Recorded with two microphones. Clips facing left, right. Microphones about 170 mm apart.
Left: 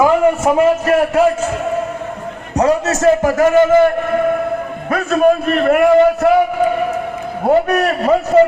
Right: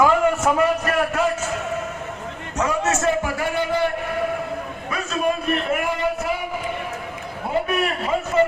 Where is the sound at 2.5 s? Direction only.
35° left (ahead or behind).